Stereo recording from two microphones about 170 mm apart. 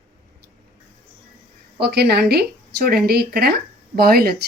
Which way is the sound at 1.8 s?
70° right (ahead or behind).